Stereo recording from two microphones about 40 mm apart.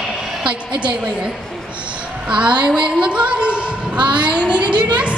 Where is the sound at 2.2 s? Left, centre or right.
Right.